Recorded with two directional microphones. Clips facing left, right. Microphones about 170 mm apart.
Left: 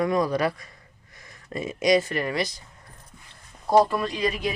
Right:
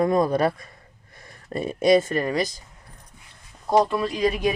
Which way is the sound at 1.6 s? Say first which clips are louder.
Right 3 dB; 55° right (ahead or behind).